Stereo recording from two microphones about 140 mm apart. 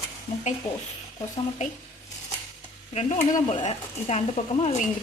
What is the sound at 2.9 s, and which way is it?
A woman's voice, 50° left (ahead or behind).